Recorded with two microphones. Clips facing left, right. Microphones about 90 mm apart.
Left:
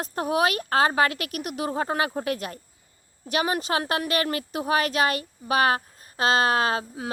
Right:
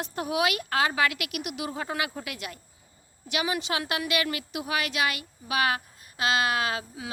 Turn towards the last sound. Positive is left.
turn(degrees=40)  # may be behind; listen again after turning